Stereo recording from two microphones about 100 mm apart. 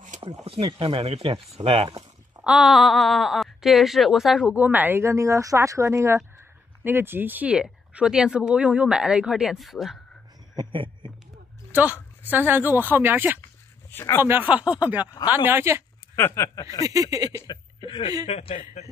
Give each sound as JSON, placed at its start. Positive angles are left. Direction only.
{"t": 0.7, "sound": "speech", "side_deg": -60}
{"t": 2.4, "sound": "speech", "side_deg": -5}
{"t": 4.6, "sound": "speech", "side_deg": -15}
{"t": 10.5, "sound": "a sound", "side_deg": -50}
{"t": 11.7, "sound": "speech", "side_deg": -15}
{"t": 16.2, "sound": "speech", "side_deg": 25}
{"t": 16.8, "sound": "a sound", "side_deg": -35}
{"t": 17.5, "sound": "speech", "side_deg": 45}
{"t": 17.8, "sound": "speech", "side_deg": 60}
{"t": 18.2, "sound": "a man's voice", "side_deg": 90}